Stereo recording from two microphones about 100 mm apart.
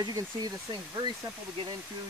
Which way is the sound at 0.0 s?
40° right (ahead or behind).